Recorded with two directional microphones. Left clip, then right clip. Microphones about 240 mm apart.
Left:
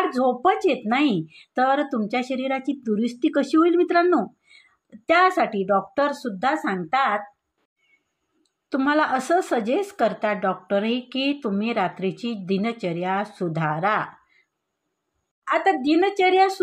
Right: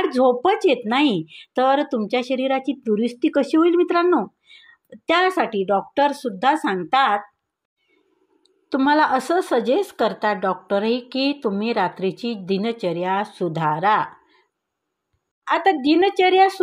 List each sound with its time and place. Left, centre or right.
0.0 s speech: right
8.6 s speech: right
15.4 s speech: right